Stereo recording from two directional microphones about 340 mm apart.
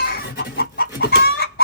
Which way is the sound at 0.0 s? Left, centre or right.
Left.